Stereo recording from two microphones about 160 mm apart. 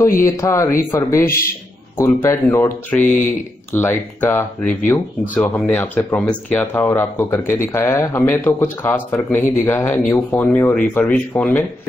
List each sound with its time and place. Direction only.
0.2 s speech: 20° left (ahead or behind)